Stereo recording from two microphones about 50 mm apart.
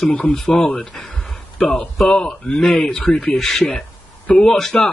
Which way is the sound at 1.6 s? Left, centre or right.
Centre.